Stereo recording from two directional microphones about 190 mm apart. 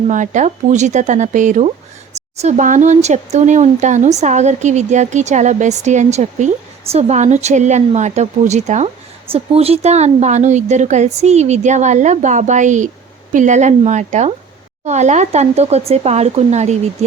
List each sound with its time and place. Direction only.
0.1 s speech: 40° right (ahead or behind)